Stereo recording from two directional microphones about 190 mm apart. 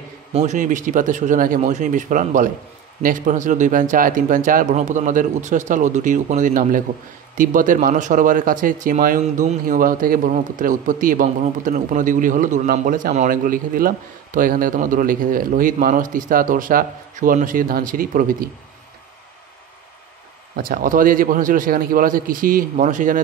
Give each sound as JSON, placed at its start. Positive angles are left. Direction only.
{"t": 0.3, "sound": "speech", "side_deg": -35}
{"t": 20.5, "sound": "speech", "side_deg": -50}